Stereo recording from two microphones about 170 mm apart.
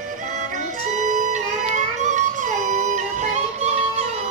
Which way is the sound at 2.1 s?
45° right (ahead or behind).